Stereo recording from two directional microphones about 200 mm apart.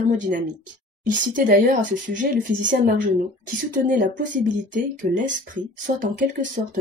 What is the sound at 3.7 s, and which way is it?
Speech, 40° right (ahead or behind).